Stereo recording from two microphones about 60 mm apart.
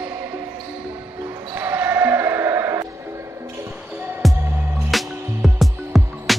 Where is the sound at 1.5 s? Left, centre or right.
Right.